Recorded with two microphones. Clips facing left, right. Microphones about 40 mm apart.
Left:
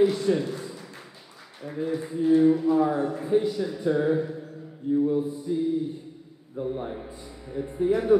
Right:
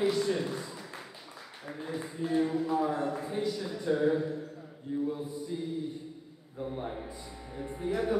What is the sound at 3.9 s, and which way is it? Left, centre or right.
A man's voice, centre.